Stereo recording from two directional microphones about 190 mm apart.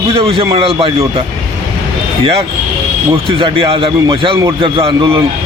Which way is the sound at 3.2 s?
30° right (ahead or behind).